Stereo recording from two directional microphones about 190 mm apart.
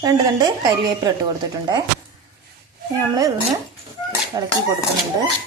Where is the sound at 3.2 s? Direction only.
20° right (ahead or behind).